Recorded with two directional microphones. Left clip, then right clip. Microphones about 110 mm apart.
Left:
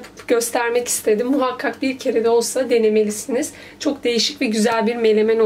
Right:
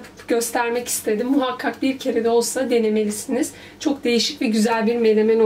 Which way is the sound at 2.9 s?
45° left (ahead or behind).